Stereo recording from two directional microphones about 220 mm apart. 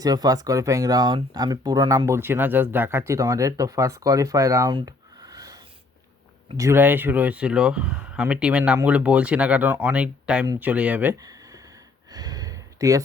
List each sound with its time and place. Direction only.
0.0 s speech: 15° right (ahead or behind)
12.1 s gasp: 15° right (ahead or behind)